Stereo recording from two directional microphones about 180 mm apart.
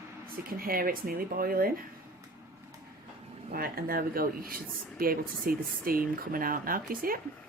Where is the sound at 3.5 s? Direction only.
55° right (ahead or behind).